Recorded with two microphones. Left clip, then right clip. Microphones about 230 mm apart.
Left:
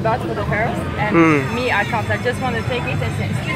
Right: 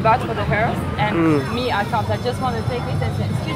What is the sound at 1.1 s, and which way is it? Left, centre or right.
Speech, centre.